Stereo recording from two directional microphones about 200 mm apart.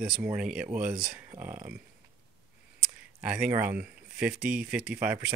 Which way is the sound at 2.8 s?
5° right (ahead or behind).